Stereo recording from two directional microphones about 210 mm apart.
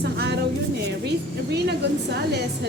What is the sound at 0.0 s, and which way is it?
Music, 50° right (ahead or behind).